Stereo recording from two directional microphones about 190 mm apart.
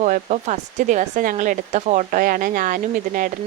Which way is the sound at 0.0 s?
40° right (ahead or behind).